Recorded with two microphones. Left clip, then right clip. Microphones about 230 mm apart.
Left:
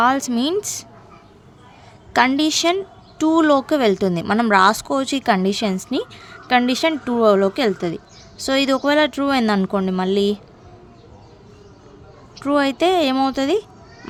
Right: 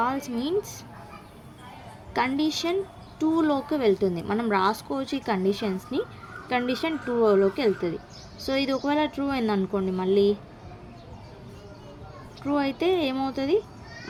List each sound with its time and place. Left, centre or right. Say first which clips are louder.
0.0 s speech: left 10 dB; left
2.1 s speech: left 9 dB; left
12.4 s speech: left 9 dB; left